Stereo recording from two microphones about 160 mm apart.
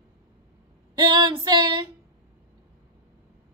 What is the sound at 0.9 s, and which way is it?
Speech, 25° right (ahead or behind).